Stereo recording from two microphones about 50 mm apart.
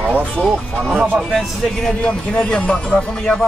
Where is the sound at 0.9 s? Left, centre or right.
Centre.